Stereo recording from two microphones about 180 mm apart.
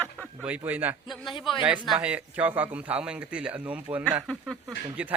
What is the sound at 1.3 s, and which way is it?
Speech, 25° left (ahead or behind).